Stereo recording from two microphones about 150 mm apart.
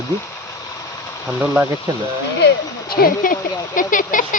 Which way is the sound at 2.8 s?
75° left (ahead or behind).